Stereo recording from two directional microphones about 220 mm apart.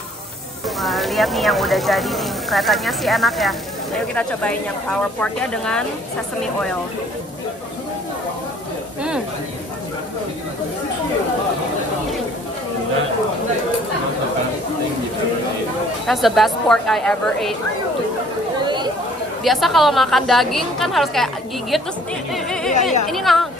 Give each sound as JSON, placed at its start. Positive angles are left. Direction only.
{"t": 0.7, "sound": "speech", "side_deg": 0}
{"t": 16.1, "sound": "speech", "side_deg": 0}
{"t": 18.6, "sound": "chatter", "side_deg": -20}
{"t": 19.4, "sound": "speech", "side_deg": 0}
{"t": 22.3, "sound": "music", "side_deg": 0}
{"t": 23.0, "sound": "speech", "side_deg": 0}